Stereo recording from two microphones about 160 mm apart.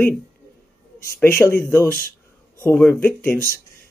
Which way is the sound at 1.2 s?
10° left (ahead or behind).